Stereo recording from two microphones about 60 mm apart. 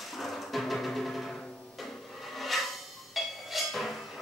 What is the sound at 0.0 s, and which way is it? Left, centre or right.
Music, centre.